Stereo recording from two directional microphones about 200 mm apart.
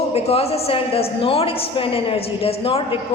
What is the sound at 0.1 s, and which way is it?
A woman's voice, 30° left (ahead or behind).